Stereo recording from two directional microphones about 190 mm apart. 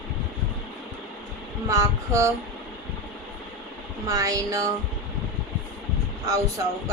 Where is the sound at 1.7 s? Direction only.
15° right (ahead or behind).